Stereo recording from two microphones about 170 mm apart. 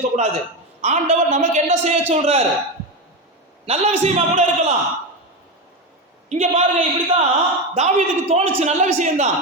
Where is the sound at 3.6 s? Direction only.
40° right (ahead or behind).